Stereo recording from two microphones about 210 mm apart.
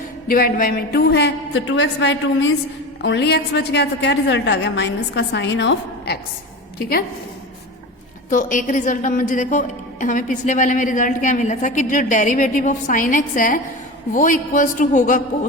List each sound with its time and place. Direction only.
0.3 s a woman's voice: 45° left (ahead or behind)
8.3 s a woman's voice: 40° left (ahead or behind)